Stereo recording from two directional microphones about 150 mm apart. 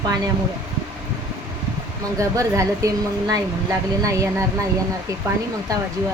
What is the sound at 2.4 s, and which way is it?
A woman's voice, 20° right (ahead or behind).